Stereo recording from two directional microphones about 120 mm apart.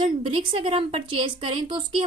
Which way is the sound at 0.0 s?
50° right (ahead or behind).